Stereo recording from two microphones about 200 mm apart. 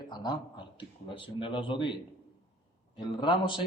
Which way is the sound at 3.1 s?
25° left (ahead or behind).